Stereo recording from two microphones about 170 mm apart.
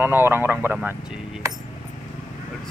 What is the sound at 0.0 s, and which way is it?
Speech, 10° right (ahead or behind).